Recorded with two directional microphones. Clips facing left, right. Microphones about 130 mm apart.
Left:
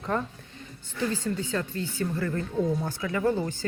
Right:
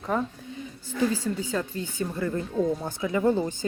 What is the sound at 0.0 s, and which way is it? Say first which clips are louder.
Speech: right 2 dB; 10° right (ahead or behind).